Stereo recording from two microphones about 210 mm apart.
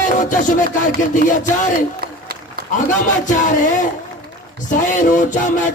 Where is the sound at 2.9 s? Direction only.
35° left (ahead or behind).